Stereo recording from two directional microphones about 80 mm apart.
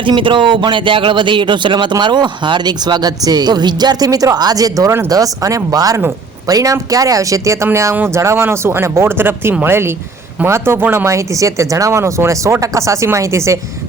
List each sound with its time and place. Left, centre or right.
0.0 s speech: right